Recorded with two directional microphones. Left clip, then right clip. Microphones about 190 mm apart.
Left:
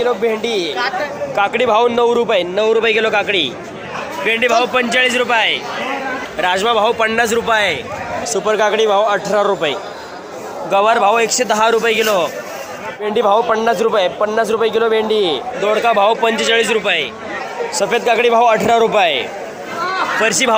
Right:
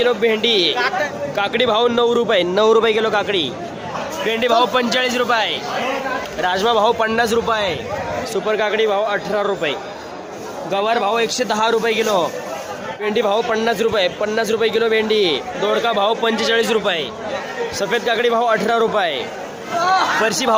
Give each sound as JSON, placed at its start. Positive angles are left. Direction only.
{"t": 0.0, "sound": "a man's voice", "side_deg": -5}
{"t": 0.8, "sound": "speech", "side_deg": -60}
{"t": 1.4, "sound": "a man's voice", "side_deg": -5}
{"t": 2.9, "sound": "a man's voice", "side_deg": 0}
{"t": 6.4, "sound": "a man's voice", "side_deg": 5}
{"t": 10.7, "sound": "a man's voice", "side_deg": 0}
{"t": 17.7, "sound": "a man's voice", "side_deg": 5}
{"t": 20.2, "sound": "a man's voice", "side_deg": 5}